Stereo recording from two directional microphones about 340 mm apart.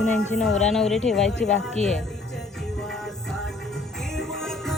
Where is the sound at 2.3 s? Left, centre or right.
Centre.